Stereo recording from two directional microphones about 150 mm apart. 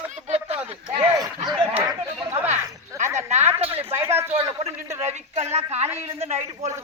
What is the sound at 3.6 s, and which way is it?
Speech, 40° right (ahead or behind).